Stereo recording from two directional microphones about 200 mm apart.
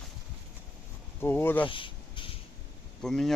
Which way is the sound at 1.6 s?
25° left (ahead or behind).